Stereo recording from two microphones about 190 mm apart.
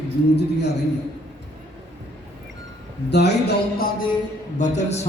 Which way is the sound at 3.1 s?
60° left (ahead or behind).